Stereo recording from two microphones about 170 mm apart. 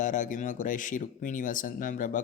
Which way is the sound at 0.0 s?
50° left (ahead or behind).